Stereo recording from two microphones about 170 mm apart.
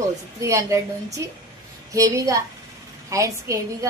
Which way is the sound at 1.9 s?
20° right (ahead or behind).